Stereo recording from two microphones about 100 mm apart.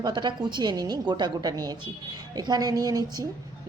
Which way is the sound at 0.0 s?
50° right (ahead or behind).